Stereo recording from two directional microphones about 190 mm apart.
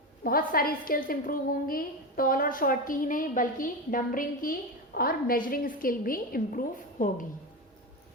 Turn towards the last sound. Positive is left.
turn(degrees=45)  # may be behind; listen again after turning